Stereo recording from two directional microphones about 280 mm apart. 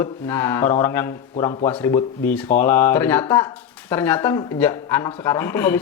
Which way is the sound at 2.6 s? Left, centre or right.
Centre.